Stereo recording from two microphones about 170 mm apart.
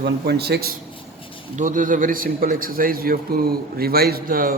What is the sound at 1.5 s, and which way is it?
A man's voice, 50° right (ahead or behind).